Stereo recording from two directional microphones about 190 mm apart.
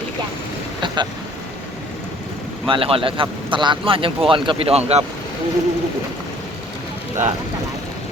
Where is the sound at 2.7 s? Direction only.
30° right (ahead or behind).